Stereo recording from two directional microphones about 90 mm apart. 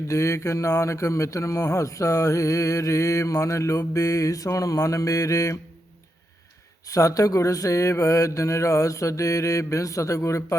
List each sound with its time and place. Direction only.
0.1 s speech: 35° left (ahead or behind)
6.8 s speech: 40° left (ahead or behind)